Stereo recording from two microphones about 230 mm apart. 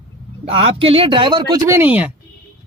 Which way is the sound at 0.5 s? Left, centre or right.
Right.